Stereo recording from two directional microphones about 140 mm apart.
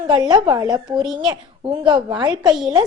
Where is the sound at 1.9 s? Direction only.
30° right (ahead or behind).